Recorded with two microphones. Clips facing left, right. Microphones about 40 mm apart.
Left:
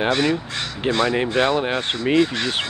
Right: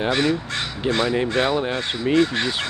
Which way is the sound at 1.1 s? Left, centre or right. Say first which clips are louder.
Left 1 dB; left.